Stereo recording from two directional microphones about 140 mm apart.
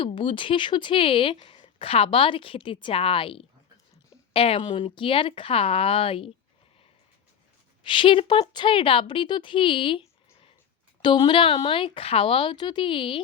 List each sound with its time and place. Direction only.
0.0 s speech: 35° left (ahead or behind)
7.9 s speech: 35° left (ahead or behind)